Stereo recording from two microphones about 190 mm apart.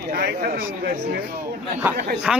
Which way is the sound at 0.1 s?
55° right (ahead or behind).